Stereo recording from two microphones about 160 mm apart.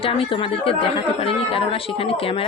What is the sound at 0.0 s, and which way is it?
Speech, 35° left (ahead or behind).